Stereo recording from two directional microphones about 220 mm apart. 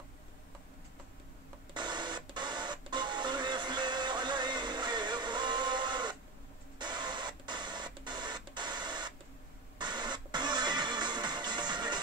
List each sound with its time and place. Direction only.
1.7 s printer: 20° right (ahead or behind)
6.8 s a sound: 20° right (ahead or behind)
9.8 s music: 20° right (ahead or behind)